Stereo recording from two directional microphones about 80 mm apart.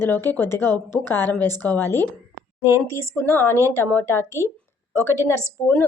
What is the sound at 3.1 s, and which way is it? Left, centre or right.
A woman's voice, left.